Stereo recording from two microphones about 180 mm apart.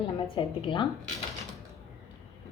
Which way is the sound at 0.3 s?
30° left (ahead or behind).